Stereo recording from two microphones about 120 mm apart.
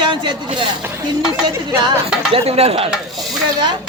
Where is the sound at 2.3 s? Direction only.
60° right (ahead or behind).